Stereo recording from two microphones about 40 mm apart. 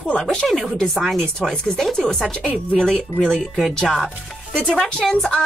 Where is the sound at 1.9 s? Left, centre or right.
Centre.